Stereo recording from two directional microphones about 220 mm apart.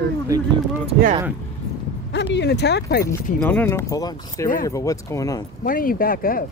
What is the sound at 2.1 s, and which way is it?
Speech, 50° left (ahead or behind).